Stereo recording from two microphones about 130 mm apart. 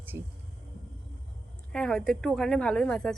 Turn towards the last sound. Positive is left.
turn(degrees=5)  # may be behind; listen again after turning